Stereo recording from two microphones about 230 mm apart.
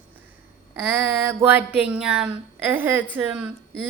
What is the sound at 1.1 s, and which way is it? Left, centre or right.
A woman's voice, centre.